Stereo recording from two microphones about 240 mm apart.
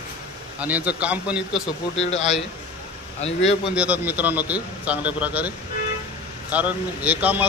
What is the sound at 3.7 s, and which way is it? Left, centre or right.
Speech, centre.